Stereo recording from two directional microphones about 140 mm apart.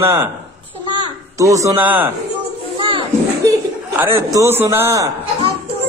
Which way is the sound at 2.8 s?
40° right (ahead or behind).